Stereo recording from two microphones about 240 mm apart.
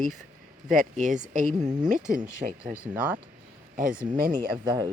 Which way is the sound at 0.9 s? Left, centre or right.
Right.